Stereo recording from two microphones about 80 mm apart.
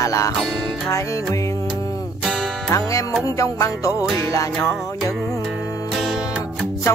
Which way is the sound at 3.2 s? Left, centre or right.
Left.